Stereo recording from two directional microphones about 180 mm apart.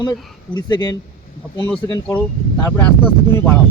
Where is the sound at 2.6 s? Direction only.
10° left (ahead or behind).